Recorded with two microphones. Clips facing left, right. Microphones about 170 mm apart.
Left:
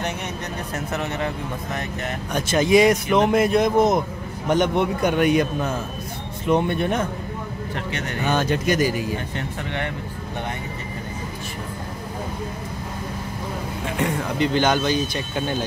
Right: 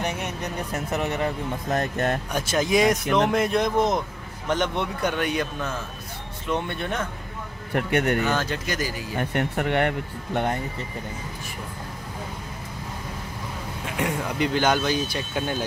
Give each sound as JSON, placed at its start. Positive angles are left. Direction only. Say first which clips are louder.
{"t": 1.7, "sound": "speech", "louder": "right 8 dB", "side_deg": -50}
{"t": 2.3, "sound": "a man's voice", "louder": "left 7 dB", "side_deg": 0}
{"t": 7.7, "sound": "speech", "louder": "right 9 dB", "side_deg": -55}
{"t": 8.2, "sound": "speech", "louder": "left 3 dB", "side_deg": 20}
{"t": 9.3, "sound": "speech", "louder": "right 5 dB", "side_deg": -55}
{"t": 13.9, "sound": "speech", "louder": "left 2 dB", "side_deg": -5}